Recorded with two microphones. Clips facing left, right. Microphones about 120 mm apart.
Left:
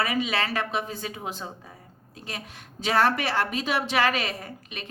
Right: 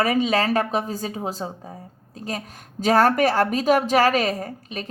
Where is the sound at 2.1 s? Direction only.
40° right (ahead or behind).